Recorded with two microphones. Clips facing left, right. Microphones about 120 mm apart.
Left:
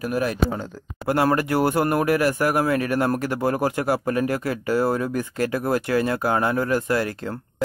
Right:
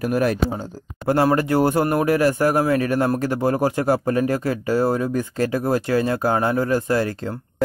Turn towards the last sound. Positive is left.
turn(degrees=-30)  # may be behind; listen again after turning